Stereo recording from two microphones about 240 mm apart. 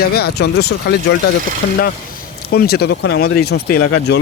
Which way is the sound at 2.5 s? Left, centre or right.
Left.